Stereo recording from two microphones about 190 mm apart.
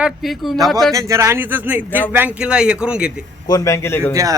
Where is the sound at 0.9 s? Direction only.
15° right (ahead or behind).